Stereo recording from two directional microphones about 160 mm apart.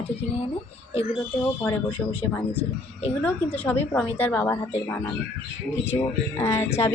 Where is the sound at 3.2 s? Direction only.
10° left (ahead or behind).